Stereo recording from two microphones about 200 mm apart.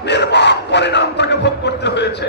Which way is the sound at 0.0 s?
60° left (ahead or behind).